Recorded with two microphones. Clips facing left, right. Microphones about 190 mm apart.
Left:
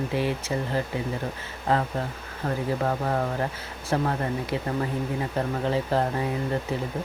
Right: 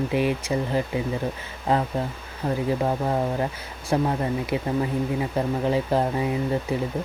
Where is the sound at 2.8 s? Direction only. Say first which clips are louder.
Right 2 dB; 15° right (ahead or behind).